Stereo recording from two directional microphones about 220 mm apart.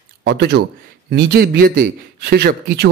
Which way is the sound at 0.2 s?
50° right (ahead or behind).